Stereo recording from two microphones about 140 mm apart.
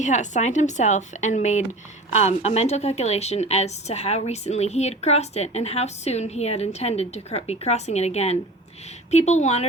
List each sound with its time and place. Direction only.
0.0 s a woman's voice: 60° left (ahead or behind)